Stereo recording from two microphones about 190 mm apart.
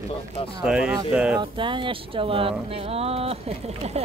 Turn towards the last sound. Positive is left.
turn(degrees=-30)  # may be behind; listen again after turning